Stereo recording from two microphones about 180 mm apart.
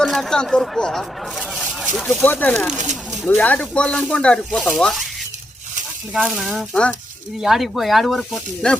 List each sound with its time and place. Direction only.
0.0 s speech: centre (ahead or behind)
2.7 s speech: 40° right (ahead or behind)
3.2 s speech: 10° left (ahead or behind)
6.1 s speech: centre (ahead or behind)